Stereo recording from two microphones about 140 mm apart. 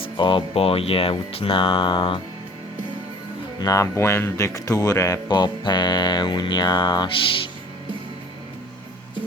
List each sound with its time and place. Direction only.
0.0 s speech: 35° left (ahead or behind)
3.6 s speech: 25° left (ahead or behind)